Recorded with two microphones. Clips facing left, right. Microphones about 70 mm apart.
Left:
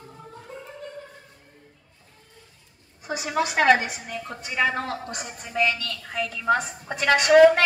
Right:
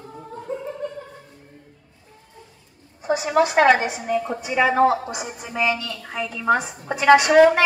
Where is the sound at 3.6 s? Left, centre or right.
Centre.